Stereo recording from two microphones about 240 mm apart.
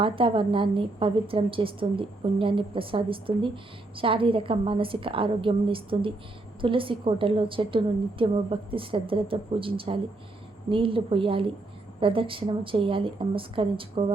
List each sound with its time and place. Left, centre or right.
0.0 s a woman's voice: right